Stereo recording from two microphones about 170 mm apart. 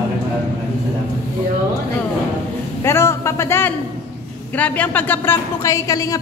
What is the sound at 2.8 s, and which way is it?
A man's voice, 15° left (ahead or behind).